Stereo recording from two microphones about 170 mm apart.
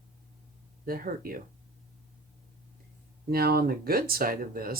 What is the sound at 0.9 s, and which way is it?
Speech, 60° right (ahead or behind).